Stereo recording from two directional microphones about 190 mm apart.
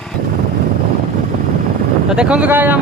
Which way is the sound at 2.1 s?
5° right (ahead or behind).